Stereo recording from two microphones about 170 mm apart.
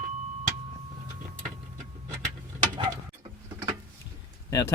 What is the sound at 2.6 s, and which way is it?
Tick-tock, 25° right (ahead or behind).